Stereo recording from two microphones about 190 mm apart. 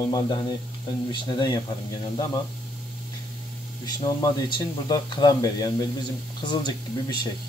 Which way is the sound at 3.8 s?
20° left (ahead or behind).